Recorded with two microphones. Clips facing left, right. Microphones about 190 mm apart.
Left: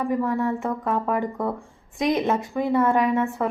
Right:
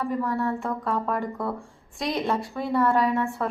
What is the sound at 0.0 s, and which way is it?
A woman's voice, 15° left (ahead or behind).